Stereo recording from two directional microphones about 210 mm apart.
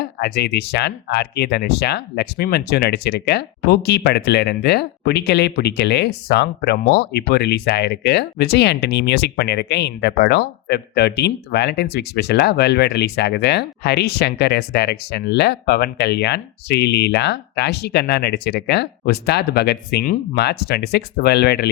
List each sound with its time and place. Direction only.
0.0 s speech: 50° left (ahead or behind)